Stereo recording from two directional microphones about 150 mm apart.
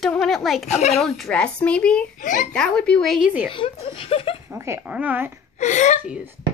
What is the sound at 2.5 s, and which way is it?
A woman's voice, 5° left (ahead or behind).